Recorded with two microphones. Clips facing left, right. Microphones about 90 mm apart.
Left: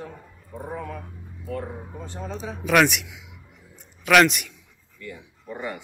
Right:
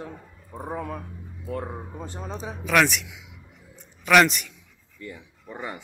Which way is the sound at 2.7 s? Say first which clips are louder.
Left 2 dB; 5° left (ahead or behind).